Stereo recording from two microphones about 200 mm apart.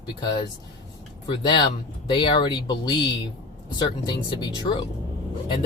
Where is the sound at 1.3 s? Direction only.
20° left (ahead or behind).